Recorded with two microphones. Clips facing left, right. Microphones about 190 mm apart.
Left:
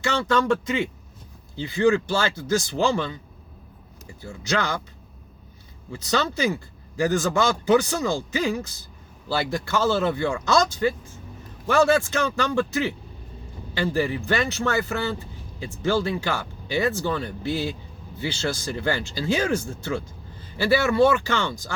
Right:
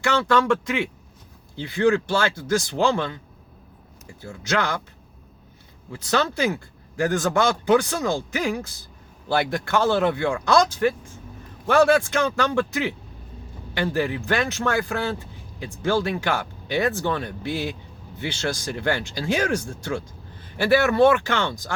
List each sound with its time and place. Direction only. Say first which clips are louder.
0.0 s speech: right 2 dB; 70° right (ahead or behind)
1.7 s speech: even; 55° right (ahead or behind)
4.3 s speech: right 1 dB; 60° right (ahead or behind)
5.9 s speech: right 1 dB; 60° right (ahead or behind)
9.3 s speech: right 3 dB; 55° right (ahead or behind)